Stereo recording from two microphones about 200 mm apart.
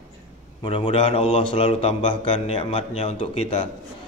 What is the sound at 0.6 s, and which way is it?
Speech, 25° left (ahead or behind).